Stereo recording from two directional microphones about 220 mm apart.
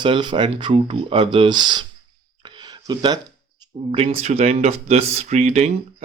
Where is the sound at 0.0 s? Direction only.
20° right (ahead or behind).